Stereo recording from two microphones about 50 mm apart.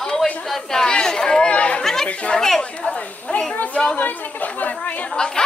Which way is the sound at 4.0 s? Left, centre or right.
Left.